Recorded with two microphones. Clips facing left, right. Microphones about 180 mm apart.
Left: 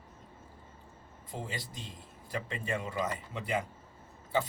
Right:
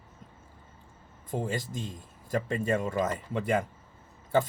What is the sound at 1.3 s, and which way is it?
Speech, 45° right (ahead or behind).